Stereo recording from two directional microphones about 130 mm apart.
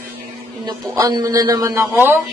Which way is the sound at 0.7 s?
30° right (ahead or behind).